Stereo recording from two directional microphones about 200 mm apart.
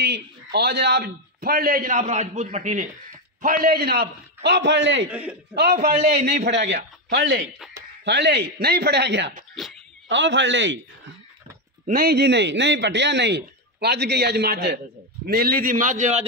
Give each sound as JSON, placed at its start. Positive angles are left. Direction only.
{"t": 0.0, "sound": "a man's voice", "side_deg": -55}
{"t": 3.4, "sound": "a man's voice", "side_deg": -50}
{"t": 5.9, "sound": "a man's voice", "side_deg": -30}
{"t": 6.7, "sound": "a man's voice", "side_deg": -60}
{"t": 11.8, "sound": "a man's voice", "side_deg": -45}